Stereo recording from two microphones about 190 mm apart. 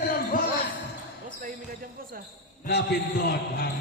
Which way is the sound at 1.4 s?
45° right (ahead or behind).